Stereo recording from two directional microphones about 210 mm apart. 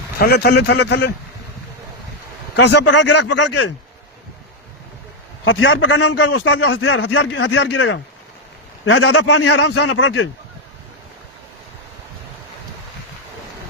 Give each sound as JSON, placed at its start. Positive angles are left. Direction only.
{"t": 0.2, "sound": "speech", "side_deg": 50}
{"t": 2.6, "sound": "speech", "side_deg": 55}
{"t": 3.1, "sound": "speech", "side_deg": 55}
{"t": 5.5, "sound": "a man's voice", "side_deg": 70}
{"t": 7.0, "sound": "speech", "side_deg": 55}